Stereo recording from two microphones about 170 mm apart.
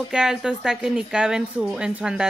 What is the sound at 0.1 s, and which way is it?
A woman's voice, 5° right (ahead or behind).